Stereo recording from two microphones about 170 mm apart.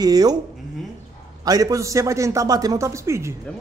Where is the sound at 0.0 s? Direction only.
20° right (ahead or behind).